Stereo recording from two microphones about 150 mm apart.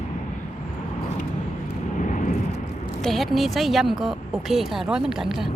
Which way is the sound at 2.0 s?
60° left (ahead or behind).